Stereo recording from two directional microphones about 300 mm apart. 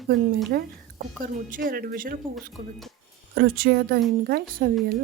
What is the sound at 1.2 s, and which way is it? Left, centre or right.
Speech, right.